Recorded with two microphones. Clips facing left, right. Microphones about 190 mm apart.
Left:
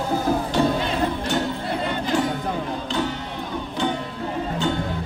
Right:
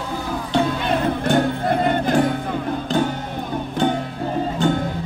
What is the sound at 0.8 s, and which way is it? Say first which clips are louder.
Music: right 4 dB; 55° right (ahead or behind).